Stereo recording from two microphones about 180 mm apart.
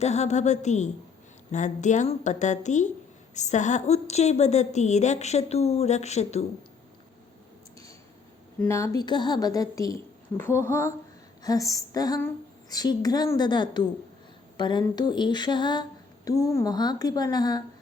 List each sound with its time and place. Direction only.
0.0 s a woman's voice: 40° left (ahead or behind)
8.6 s a woman's voice: 15° left (ahead or behind)
11.4 s a sound: 20° left (ahead or behind)